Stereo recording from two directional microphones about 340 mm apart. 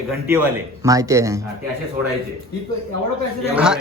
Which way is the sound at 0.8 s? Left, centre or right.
Centre.